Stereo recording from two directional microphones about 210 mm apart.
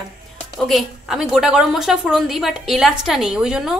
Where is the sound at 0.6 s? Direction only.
Centre (ahead or behind).